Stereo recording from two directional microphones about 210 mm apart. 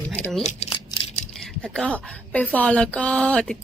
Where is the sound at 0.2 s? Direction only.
Centre (ahead or behind).